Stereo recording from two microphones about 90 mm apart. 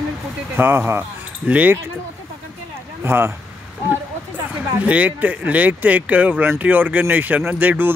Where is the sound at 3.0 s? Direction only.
25° right (ahead or behind).